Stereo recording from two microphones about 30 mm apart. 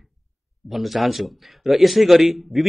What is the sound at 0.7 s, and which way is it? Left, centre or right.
A man's voice, centre.